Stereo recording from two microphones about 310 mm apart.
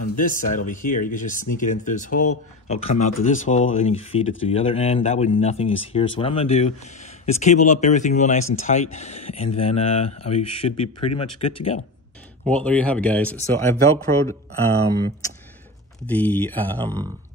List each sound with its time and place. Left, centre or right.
0.1 s speech: left
12.4 s speech: centre
16.1 s speech: centre